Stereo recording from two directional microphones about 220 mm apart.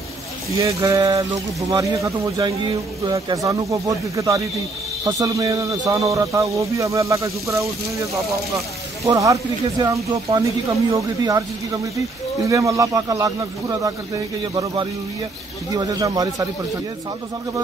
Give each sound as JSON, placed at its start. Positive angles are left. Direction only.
{"t": 0.6, "sound": "speech", "side_deg": -15}